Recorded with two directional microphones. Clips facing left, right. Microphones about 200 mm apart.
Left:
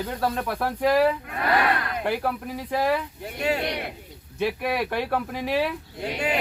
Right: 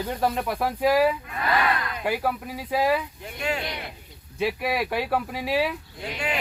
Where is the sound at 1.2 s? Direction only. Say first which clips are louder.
Left 2 dB; 60° left (ahead or behind).